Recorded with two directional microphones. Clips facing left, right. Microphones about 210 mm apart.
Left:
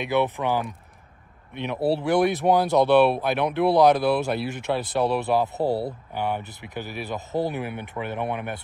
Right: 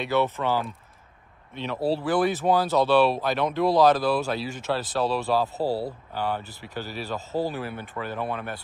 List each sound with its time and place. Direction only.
0.0 s speech: 15° left (ahead or behind)